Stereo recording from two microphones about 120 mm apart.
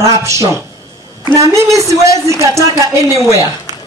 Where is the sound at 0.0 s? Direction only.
25° right (ahead or behind).